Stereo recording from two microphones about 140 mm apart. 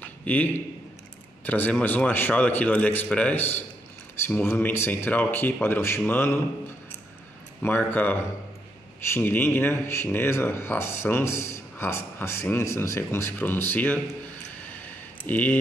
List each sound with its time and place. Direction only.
0.0 s a sound: 10° left (ahead or behind)
1.4 s speech: 10° left (ahead or behind)
7.6 s speech: 15° left (ahead or behind)
15.2 s speech: 10° left (ahead or behind)